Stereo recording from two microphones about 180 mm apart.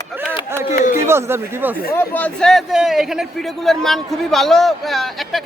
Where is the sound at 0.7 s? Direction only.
45° left (ahead or behind).